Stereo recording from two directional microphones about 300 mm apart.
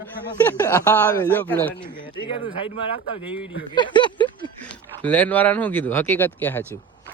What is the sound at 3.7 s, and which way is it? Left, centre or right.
Speech, centre.